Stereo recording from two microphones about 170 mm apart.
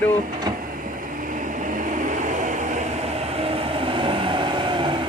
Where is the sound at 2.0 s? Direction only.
45° right (ahead or behind).